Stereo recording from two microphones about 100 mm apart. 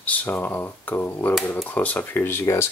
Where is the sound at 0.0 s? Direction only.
15° left (ahead or behind).